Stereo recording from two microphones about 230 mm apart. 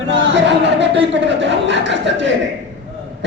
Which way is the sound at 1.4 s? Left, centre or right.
Right.